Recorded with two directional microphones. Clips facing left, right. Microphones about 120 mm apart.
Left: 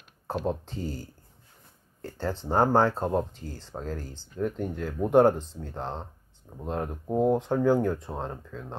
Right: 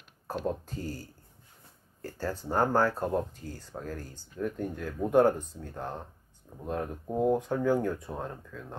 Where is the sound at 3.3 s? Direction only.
90° left.